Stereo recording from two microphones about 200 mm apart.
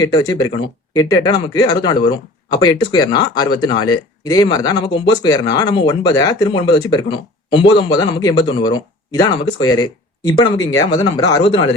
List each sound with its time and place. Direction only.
0.0 s speech: 20° left (ahead or behind)